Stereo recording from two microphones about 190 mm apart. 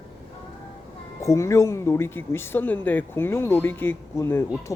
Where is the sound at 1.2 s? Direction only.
15° left (ahead or behind).